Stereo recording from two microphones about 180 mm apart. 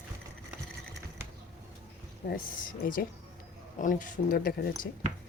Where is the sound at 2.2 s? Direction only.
65° left (ahead or behind).